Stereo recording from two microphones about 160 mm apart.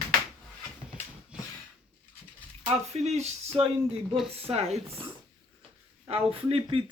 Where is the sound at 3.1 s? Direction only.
45° right (ahead or behind).